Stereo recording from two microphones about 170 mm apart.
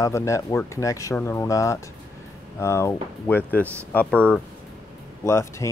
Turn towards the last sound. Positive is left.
turn(degrees=15)  # may be behind; listen again after turning